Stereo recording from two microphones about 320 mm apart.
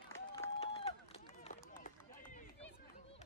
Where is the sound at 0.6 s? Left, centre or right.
Centre.